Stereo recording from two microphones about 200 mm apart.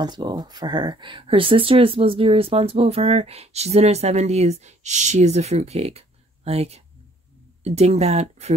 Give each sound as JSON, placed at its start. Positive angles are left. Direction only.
{"t": 0.0, "sound": "speech", "side_deg": -20}